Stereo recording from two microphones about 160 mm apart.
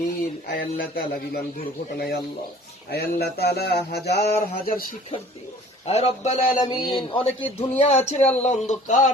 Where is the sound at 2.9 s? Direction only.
85° left.